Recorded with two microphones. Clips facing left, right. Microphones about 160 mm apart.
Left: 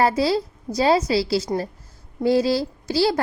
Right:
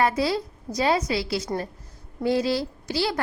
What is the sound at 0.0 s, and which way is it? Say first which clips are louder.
A woman's voice: left 3 dB; 30° left (ahead or behind).